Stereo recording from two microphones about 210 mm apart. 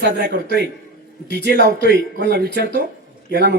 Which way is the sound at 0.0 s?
50° right (ahead or behind).